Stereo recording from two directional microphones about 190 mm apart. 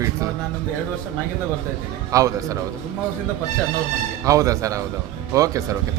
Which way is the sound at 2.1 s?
15° right (ahead or behind).